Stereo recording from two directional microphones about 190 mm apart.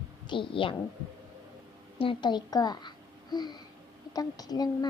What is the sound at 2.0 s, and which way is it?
A child's voice, 25° left (ahead or behind).